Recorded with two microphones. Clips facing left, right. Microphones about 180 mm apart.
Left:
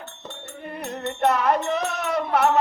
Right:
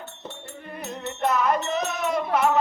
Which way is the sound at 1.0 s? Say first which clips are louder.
Left 2 dB; 65° left (ahead or behind).